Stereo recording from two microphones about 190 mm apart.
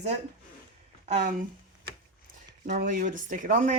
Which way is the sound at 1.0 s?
40° right (ahead or behind).